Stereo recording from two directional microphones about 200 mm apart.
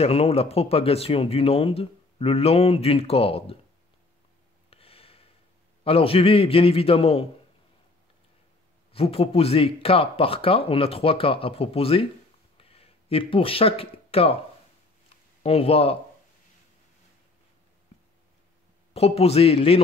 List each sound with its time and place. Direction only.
0.0 s speech: 30° left (ahead or behind)
4.6 s a sound: 30° left (ahead or behind)
5.9 s speech: 30° left (ahead or behind)
8.9 s speech: 30° left (ahead or behind)
12.5 s a sound: 30° left (ahead or behind)
15.4 s speech: 30° left (ahead or behind)
18.9 s a man's voice: 30° left (ahead or behind)